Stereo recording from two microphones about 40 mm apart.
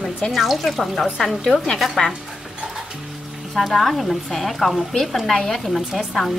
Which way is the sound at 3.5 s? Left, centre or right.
Centre.